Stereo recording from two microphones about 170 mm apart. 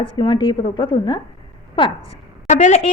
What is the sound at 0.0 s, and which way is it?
A woman's voice, 30° left (ahead or behind).